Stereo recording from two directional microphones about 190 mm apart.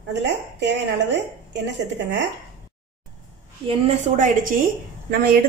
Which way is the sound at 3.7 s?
40° right (ahead or behind).